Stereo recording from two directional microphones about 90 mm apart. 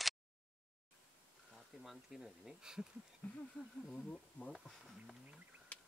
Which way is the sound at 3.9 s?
10° left (ahead or behind).